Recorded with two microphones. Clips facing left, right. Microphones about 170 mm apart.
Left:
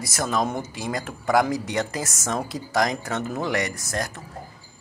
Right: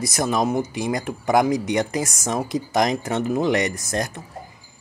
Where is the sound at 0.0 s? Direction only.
20° right (ahead or behind).